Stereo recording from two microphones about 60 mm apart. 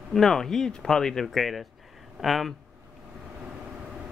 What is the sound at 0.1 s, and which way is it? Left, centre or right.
Speech, centre.